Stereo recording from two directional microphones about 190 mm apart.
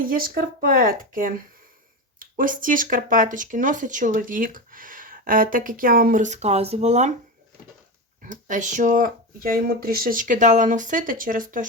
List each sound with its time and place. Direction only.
0.0 s speech: 50° right (ahead or behind)
8.2 s speech: 40° right (ahead or behind)